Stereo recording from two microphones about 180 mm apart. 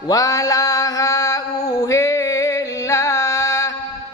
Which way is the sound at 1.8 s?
15° left (ahead or behind).